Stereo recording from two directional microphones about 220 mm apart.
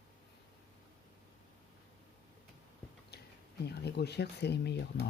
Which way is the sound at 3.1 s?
45° left (ahead or behind).